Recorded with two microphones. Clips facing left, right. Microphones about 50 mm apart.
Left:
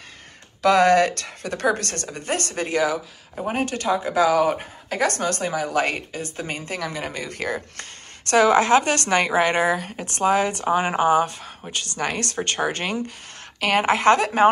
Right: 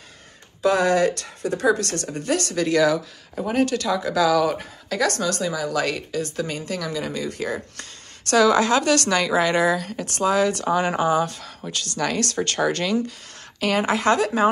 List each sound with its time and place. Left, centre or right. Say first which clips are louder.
0.6 s speech: left 3 dB; left
13.6 s speech: left 2 dB; left